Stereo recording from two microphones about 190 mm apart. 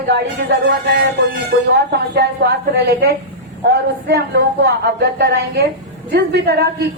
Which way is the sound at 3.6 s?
55° right (ahead or behind).